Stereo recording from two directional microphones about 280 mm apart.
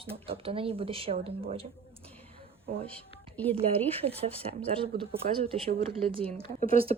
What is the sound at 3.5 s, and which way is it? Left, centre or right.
Speech, right.